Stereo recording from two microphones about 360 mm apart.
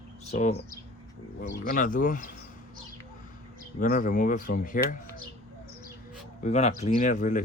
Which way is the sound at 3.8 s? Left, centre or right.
Left.